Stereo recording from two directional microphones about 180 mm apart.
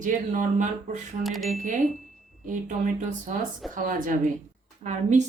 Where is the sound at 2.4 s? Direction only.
45° right (ahead or behind).